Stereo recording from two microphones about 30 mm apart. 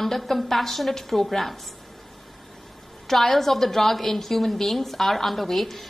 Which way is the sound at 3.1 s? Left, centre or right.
Centre.